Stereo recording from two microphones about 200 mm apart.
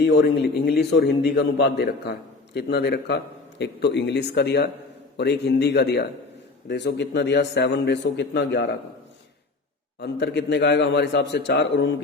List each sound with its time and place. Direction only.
0.0 s a man's voice: 55° left (ahead or behind)
10.0 s a man's voice: 55° left (ahead or behind)